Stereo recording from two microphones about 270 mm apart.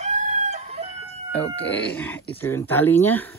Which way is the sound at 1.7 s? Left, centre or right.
Centre.